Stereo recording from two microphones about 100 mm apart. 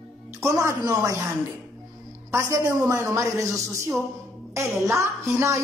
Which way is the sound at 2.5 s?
35° right (ahead or behind).